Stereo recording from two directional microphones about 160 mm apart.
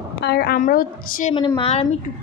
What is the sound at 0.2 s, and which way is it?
A woman's voice, 80° left.